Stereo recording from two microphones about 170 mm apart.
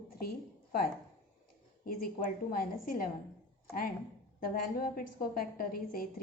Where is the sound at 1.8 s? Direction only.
55° left (ahead or behind).